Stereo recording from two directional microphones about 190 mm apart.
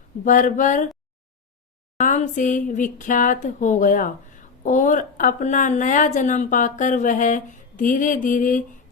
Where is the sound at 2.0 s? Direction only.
40° left (ahead or behind).